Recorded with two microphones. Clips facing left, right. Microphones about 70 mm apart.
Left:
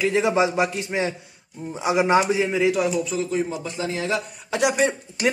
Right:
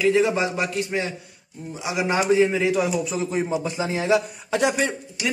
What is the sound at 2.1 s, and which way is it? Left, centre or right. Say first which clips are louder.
Speech: right 1 dB; centre.